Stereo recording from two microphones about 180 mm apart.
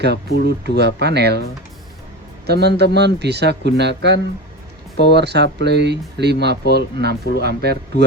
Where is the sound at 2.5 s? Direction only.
65° right (ahead or behind).